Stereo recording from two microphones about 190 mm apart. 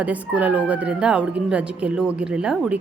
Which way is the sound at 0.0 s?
10° right (ahead or behind).